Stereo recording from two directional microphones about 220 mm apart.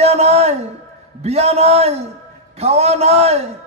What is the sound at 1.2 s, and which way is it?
A man's voice, 30° right (ahead or behind).